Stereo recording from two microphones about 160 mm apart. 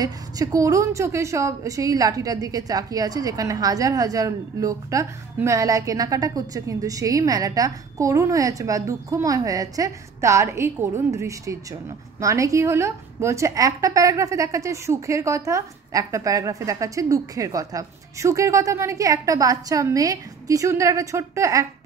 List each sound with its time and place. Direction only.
0.0 s a woman's voice: 20° right (ahead or behind)